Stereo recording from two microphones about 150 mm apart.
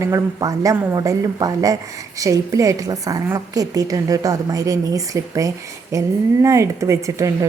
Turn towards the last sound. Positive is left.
turn(degrees=-20)  # may be behind; listen again after turning